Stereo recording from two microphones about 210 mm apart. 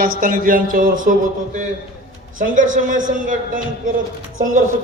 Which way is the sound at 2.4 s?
40° right (ahead or behind).